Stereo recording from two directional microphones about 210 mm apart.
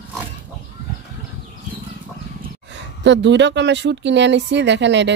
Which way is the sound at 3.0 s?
60° right (ahead or behind).